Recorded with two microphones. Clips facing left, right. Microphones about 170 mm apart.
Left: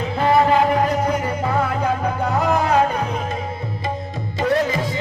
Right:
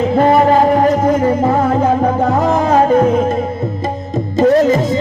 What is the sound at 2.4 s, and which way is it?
Music, 45° right (ahead or behind).